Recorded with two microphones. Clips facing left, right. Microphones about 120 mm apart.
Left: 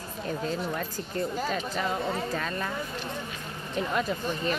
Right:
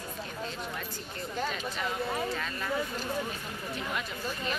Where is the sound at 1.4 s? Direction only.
40° left (ahead or behind).